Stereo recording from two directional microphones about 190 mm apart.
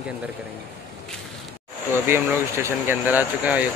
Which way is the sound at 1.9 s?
15° right (ahead or behind).